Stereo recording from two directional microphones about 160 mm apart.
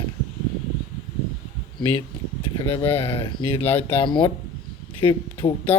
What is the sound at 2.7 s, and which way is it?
Speech, 35° left (ahead or behind).